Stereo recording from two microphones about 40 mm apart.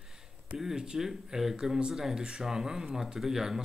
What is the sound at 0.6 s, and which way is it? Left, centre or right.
Speech, centre.